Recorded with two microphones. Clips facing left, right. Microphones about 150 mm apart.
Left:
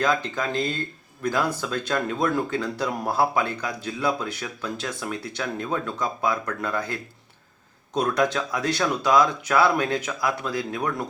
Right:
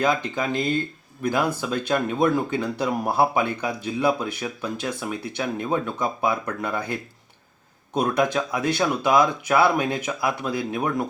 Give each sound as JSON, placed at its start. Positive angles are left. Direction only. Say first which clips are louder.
{"t": 0.0, "sound": "speech", "louder": "right 1 dB", "side_deg": -10}
{"t": 8.1, "sound": "speech", "louder": "right 1 dB", "side_deg": -15}